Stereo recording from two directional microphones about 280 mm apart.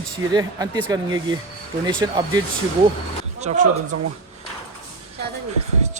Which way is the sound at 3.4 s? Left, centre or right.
Right.